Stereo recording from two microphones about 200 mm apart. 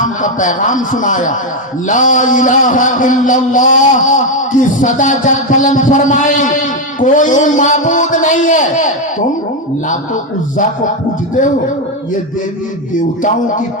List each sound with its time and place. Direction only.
0.0 s a man's voice: 40° left (ahead or behind)